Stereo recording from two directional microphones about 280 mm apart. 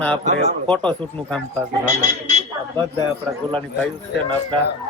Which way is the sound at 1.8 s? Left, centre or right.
Right.